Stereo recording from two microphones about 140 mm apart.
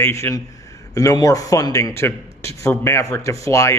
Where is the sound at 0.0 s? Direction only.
20° left (ahead or behind).